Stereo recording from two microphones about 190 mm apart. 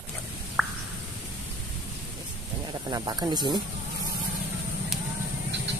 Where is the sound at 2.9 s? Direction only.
20° right (ahead or behind).